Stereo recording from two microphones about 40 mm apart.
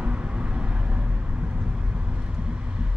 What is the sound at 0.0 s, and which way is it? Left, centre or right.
Vehicle, right.